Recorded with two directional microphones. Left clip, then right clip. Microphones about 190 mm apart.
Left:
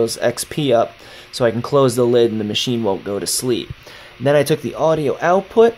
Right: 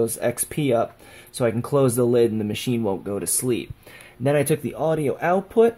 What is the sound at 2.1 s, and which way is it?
Speech, 15° right (ahead or behind).